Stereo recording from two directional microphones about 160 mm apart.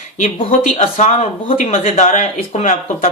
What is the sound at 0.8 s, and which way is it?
Speech, 50° left (ahead or behind).